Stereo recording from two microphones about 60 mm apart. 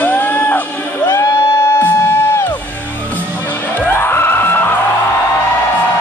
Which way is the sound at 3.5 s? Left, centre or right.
Left.